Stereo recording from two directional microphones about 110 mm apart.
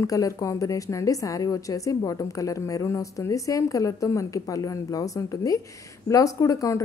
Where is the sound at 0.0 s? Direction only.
30° left (ahead or behind).